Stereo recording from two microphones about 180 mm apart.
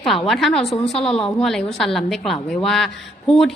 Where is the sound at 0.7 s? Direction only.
35° left (ahead or behind).